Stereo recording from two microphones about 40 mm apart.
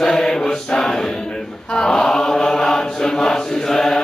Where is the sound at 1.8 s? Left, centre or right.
Centre.